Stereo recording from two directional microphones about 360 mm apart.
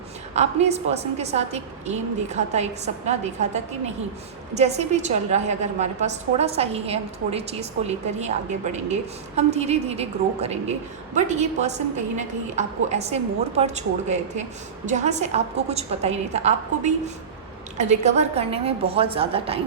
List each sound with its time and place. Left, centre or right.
0.3 s a woman's voice: centre